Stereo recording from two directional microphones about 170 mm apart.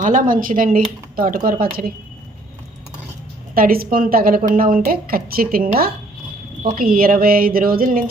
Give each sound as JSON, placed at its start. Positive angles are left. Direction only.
{"t": 0.0, "sound": "a woman's voice", "side_deg": -50}
{"t": 3.5, "sound": "a woman's voice", "side_deg": -60}